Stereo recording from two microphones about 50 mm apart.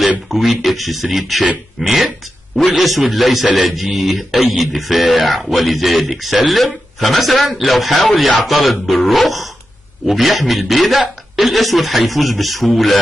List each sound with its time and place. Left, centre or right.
0.3 s speech: centre
3.4 s speech: centre
3.7 s speech: centre